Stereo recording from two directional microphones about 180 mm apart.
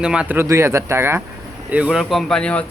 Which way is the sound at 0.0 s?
5° right (ahead or behind).